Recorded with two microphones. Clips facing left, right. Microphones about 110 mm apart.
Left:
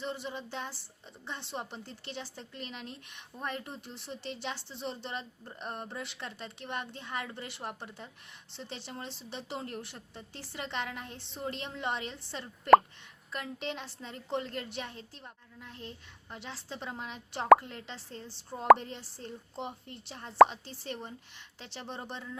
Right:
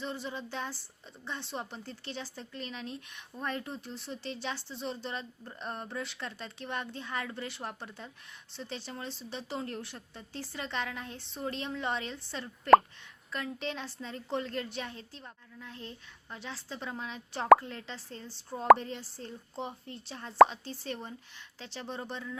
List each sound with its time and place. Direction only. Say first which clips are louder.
0.0 s speech: even; 20° left (ahead or behind)
18.5 s speech: even; 5° left (ahead or behind)
18.8 s speech: right 3 dB; 25° left (ahead or behind)